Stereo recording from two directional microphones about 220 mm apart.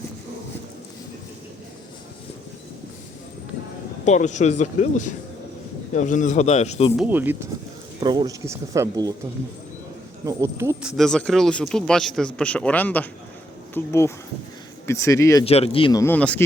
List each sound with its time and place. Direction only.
4.0 s speech: 30° left (ahead or behind)
6.9 s speech: 5° right (ahead or behind)
10.2 s speech: 15° right (ahead or behind)
10.9 s speech: centre (ahead or behind)
15.4 s speech: 25° left (ahead or behind); by 16.4 s 5° left (ahead or behind)